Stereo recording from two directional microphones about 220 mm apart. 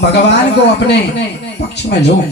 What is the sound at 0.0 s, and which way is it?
Speech, 50° left (ahead or behind).